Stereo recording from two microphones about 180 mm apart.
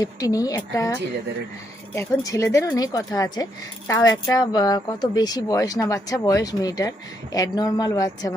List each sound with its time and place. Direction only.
0.0 s speech: 20° left (ahead or behind)
2.0 s speech: 15° left (ahead or behind)